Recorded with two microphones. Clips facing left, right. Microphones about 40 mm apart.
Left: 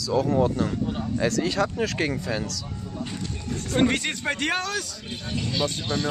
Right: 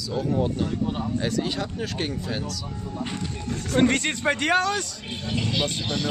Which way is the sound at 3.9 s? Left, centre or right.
Centre.